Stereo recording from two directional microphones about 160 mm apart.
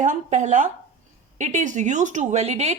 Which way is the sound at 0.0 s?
50° right (ahead or behind).